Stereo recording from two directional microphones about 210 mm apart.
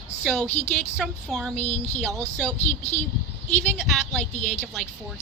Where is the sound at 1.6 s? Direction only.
35° left (ahead or behind).